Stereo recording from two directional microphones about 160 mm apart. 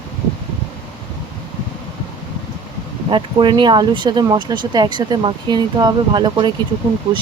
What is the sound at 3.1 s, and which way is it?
Speech, 30° right (ahead or behind).